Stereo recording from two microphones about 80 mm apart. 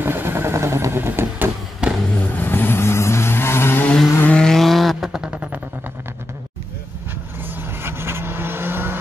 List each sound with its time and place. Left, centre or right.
0.0 s vehicle: right
1.8 s vehicle: centre
2.1 s vehicle: left
4.2 s vehicle: centre
7.8 s vehicle: right